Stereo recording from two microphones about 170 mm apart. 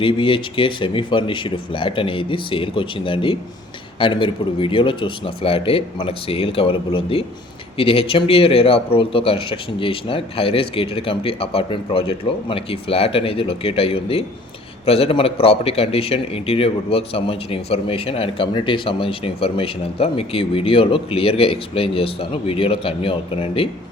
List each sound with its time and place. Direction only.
0.0 s a man's voice: 30° left (ahead or behind)